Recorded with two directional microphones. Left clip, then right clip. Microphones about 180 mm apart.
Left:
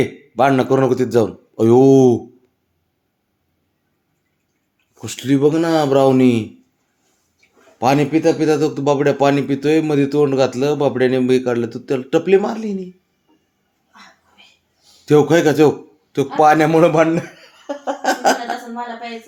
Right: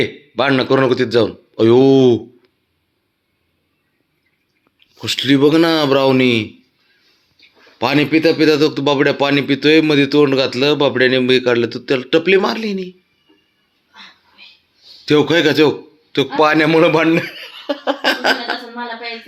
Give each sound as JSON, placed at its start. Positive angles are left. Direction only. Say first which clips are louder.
{"t": 0.0, "sound": "speech", "louder": "left 1 dB", "side_deg": 15}
{"t": 4.9, "sound": "speech", "louder": "right 4 dB", "side_deg": 5}
{"t": 7.9, "sound": "speech", "louder": "right 7 dB", "side_deg": -5}
{"t": 15.0, "sound": "speech", "louder": "even", "side_deg": 5}
{"t": 17.8, "sound": "a sound", "louder": "right 2 dB", "side_deg": -5}